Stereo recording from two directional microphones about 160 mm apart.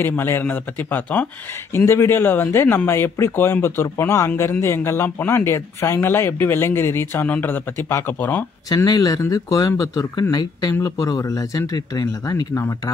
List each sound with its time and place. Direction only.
0.0 s speech: 15° left (ahead or behind)
8.6 s speech: 25° left (ahead or behind)